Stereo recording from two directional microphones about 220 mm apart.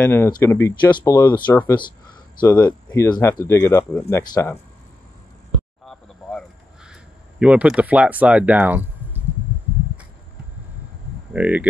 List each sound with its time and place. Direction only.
0.0 s speech: 10° left (ahead or behind)
5.9 s a sound: centre (ahead or behind)
11.3 s speech: 5° right (ahead or behind)